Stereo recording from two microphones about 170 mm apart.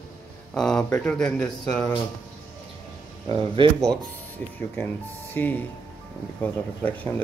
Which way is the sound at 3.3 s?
30° right (ahead or behind).